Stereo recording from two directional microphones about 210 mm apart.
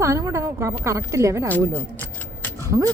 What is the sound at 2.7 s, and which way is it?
Speech, 15° right (ahead or behind).